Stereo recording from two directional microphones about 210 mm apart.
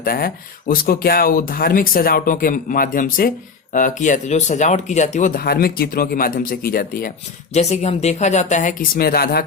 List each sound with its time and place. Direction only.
0.0 s speech: 45° left (ahead or behind)
7.5 s speech: 30° left (ahead or behind)